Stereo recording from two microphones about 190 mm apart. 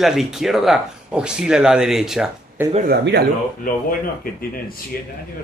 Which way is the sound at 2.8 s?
60° right (ahead or behind).